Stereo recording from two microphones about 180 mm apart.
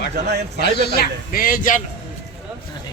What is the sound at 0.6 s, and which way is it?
A man's voice, 65° left (ahead or behind).